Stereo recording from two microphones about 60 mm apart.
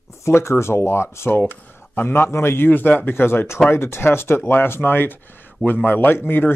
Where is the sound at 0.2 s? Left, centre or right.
Left.